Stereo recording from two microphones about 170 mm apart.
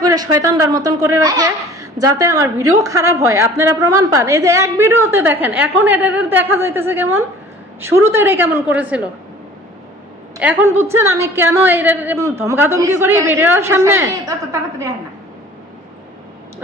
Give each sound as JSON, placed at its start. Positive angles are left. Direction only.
{"t": 0.0, "sound": "speech", "side_deg": -20}
{"t": 10.8, "sound": "speech", "side_deg": -15}